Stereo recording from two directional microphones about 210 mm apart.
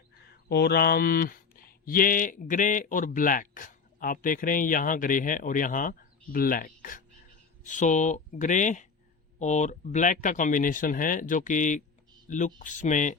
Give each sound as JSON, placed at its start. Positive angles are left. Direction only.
{"t": 0.3, "sound": "speech", "side_deg": 50}